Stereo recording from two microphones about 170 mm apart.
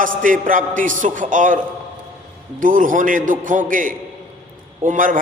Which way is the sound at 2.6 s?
50° right (ahead or behind).